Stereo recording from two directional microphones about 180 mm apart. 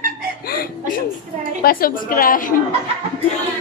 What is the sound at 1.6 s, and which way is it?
Speech, 55° left (ahead or behind).